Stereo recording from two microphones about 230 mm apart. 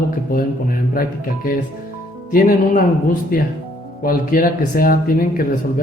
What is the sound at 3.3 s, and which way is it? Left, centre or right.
Speech, left.